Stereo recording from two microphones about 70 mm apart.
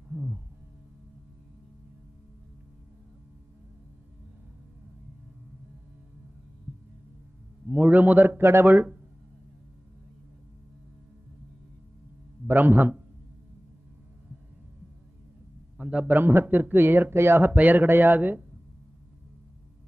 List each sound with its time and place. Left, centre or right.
7.7 s a man's voice: right
12.4 s a man's voice: right
15.8 s a man's voice: centre
16.2 s speech: right
17.5 s a man's voice: right